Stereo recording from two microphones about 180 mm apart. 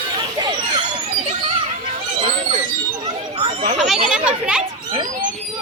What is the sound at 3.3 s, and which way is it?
Chatter, 35° right (ahead or behind).